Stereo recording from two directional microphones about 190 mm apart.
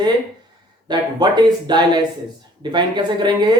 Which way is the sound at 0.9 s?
20° right (ahead or behind).